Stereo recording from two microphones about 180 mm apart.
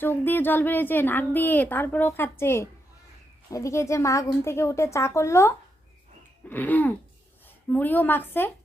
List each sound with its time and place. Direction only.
0.0 s a woman's voice: 10° left (ahead or behind)